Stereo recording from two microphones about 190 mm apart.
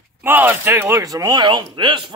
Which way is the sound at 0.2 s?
10° right (ahead or behind).